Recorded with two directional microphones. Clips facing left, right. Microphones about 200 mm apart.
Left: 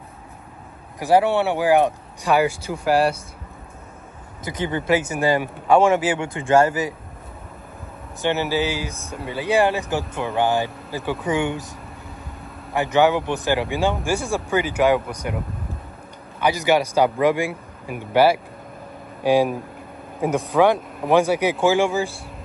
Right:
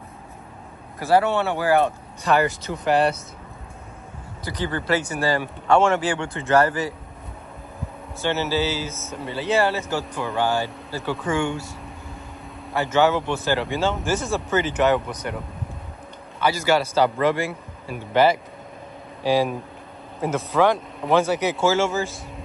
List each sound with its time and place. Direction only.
0.9 s speech: 15° left (ahead or behind)
4.5 s speech: 20° left (ahead or behind)
8.2 s speech: 15° left (ahead or behind)
12.7 s speech: 15° left (ahead or behind)